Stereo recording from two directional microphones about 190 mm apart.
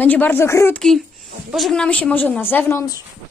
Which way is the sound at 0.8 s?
Centre (ahead or behind).